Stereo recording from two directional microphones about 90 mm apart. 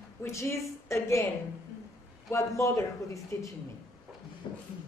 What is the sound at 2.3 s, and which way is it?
A woman's voice, 35° left (ahead or behind).